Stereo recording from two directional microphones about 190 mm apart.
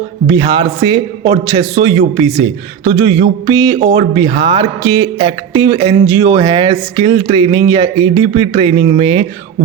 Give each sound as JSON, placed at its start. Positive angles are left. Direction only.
{"t": 0.3, "sound": "speech", "side_deg": -25}